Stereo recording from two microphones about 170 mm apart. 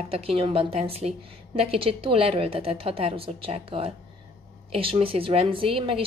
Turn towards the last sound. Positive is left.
turn(degrees=-30)  # may be behind; listen again after turning